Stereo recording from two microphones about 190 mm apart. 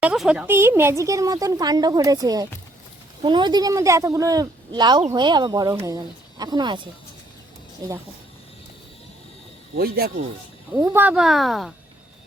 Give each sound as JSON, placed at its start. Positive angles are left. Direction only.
{"t": 0.0, "sound": "speech", "side_deg": -5}
{"t": 9.7, "sound": "speech", "side_deg": -55}
{"t": 10.7, "sound": "speech", "side_deg": -15}